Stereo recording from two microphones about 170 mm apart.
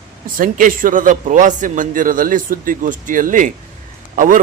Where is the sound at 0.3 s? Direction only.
55° right (ahead or behind).